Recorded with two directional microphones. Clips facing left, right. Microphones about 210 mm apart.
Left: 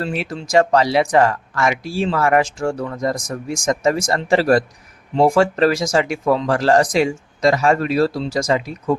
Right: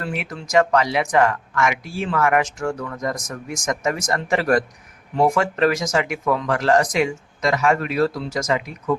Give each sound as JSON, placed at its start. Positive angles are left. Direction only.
{"t": 0.0, "sound": "speech", "side_deg": 30}